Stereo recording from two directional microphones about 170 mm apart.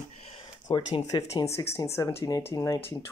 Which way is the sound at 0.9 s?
20° left (ahead or behind).